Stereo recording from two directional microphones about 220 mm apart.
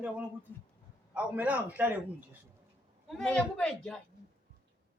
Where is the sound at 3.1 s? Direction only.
5° left (ahead or behind).